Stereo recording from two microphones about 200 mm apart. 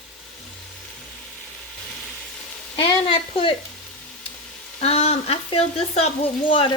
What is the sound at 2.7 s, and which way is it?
Sizzle, 25° left (ahead or behind).